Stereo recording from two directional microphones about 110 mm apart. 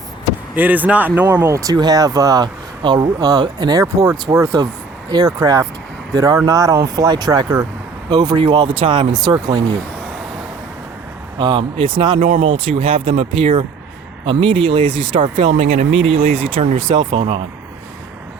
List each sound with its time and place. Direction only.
0.5 s a man's voice: 15° right (ahead or behind)
1.4 s speech: 25° right (ahead or behind)
11.3 s speech: 45° right (ahead or behind)
12.7 s speech: 60° right (ahead or behind)